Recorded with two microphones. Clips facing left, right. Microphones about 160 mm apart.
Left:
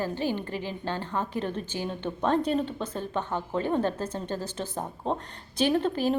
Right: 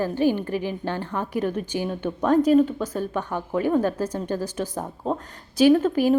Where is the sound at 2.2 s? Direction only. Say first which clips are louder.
Right 8 dB; 25° left (ahead or behind).